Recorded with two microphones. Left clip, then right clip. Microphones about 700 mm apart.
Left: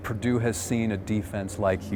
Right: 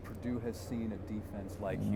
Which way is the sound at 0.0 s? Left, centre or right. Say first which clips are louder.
Left 13 dB; left.